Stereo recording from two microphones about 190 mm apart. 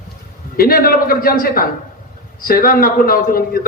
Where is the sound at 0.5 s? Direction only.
50° left (ahead or behind).